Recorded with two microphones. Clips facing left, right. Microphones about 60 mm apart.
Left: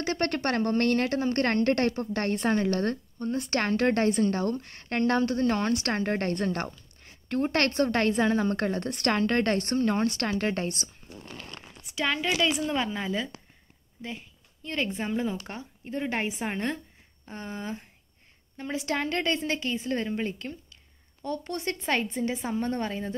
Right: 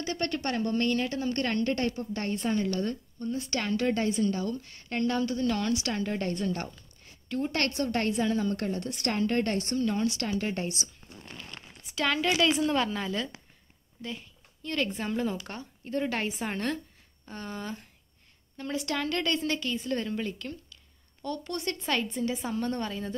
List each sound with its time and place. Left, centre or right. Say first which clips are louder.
0.1 s a woman's voice: left 3 dB; left
5.4 s a woman's voice: left 3 dB; left
10.2 s a woman's voice: left 3 dB; left
11.9 s a woman's voice: right 1 dB; centre
14.0 s a sound: even; centre
14.9 s a woman's voice: left 1 dB; centre